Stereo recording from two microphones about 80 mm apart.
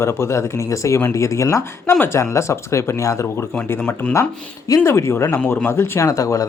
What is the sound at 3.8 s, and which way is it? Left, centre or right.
Speech, centre.